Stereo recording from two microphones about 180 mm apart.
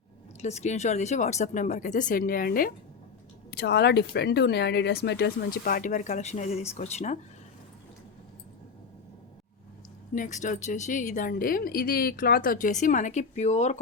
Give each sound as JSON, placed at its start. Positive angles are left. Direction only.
{"t": 0.4, "sound": "a woman's voice", "side_deg": 40}
{"t": 3.6, "sound": "a woman's voice", "side_deg": 65}
{"t": 10.2, "sound": "a woman's voice", "side_deg": 40}